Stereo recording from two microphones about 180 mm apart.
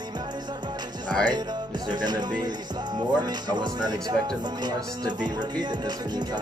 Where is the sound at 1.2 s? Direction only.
20° right (ahead or behind).